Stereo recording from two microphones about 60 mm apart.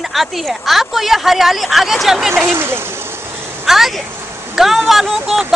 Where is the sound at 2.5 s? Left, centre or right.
Right.